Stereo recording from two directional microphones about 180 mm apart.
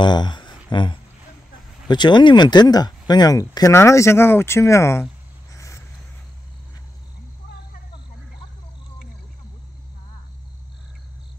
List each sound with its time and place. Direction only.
0.0 s speech: 25° left (ahead or behind)
5.5 s cricket: 15° left (ahead or behind)